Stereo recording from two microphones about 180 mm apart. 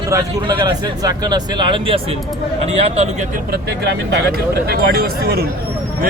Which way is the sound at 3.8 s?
70° right (ahead or behind).